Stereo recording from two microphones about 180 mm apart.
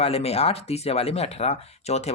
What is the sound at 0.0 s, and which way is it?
Speech, 35° left (ahead or behind).